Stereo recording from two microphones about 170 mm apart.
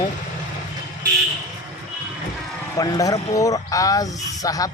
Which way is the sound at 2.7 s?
20° left (ahead or behind).